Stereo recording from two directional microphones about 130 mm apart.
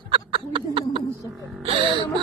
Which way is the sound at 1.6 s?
45° right (ahead or behind).